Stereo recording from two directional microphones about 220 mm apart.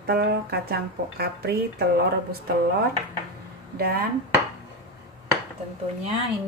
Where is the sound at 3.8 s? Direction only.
40° right (ahead or behind).